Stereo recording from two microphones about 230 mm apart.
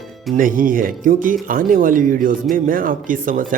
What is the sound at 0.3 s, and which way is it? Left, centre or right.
Speech, right.